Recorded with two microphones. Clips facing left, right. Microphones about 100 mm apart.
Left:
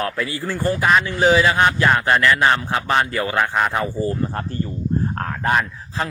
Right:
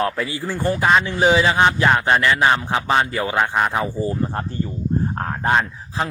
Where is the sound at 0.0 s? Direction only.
25° right (ahead or behind).